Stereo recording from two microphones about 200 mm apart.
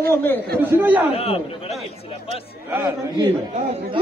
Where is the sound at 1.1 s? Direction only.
30° left (ahead or behind).